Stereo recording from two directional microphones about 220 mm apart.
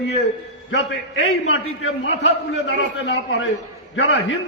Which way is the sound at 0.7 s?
65° left (ahead or behind).